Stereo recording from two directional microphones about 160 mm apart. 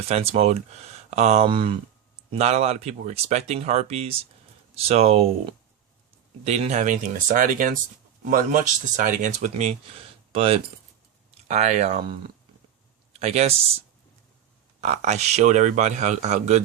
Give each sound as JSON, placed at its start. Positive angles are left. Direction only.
{"t": 0.0, "sound": "a man's voice", "side_deg": -40}
{"t": 10.3, "sound": "a man's voice", "side_deg": -35}
{"t": 13.1, "sound": "speech", "side_deg": -40}
{"t": 14.8, "sound": "a man's voice", "side_deg": -45}